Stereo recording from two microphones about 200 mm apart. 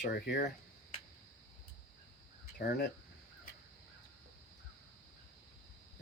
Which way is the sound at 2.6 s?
55° left (ahead or behind).